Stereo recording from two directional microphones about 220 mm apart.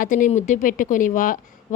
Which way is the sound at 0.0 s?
35° left (ahead or behind).